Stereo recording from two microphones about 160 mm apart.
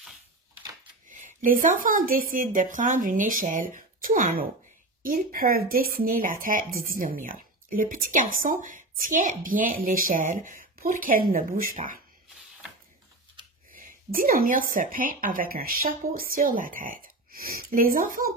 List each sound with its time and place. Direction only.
1.0 s a woman's voice: 55° right (ahead or behind)
13.7 s speech: 60° right (ahead or behind)